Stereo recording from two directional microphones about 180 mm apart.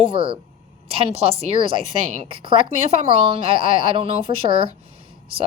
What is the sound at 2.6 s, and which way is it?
Speech, 35° right (ahead or behind).